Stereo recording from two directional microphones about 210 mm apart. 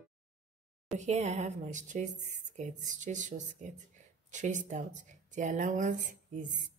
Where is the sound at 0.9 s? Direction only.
35° right (ahead or behind).